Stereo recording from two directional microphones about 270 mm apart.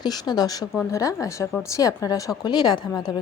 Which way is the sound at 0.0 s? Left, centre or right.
Centre.